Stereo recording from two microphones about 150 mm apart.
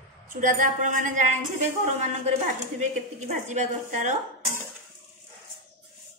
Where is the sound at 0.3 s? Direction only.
65° right (ahead or behind).